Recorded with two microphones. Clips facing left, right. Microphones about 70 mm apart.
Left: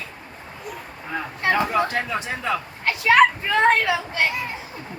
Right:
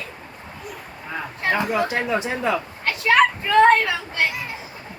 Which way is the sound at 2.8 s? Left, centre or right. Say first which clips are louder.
Left 2 dB; centre.